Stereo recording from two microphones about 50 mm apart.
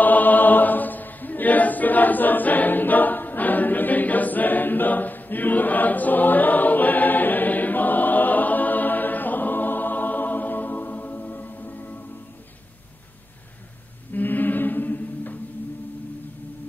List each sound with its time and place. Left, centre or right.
0.0 s choir: left
14.1 s choir: left